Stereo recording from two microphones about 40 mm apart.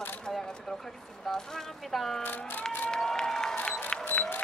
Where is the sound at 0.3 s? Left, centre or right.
Centre.